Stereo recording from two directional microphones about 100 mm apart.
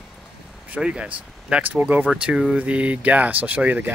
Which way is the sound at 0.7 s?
10° right (ahead or behind).